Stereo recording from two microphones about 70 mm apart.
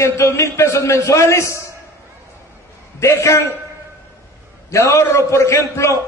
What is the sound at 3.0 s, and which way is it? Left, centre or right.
Speech, left.